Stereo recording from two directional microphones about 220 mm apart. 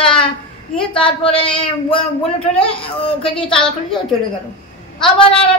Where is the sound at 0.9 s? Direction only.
25° left (ahead or behind).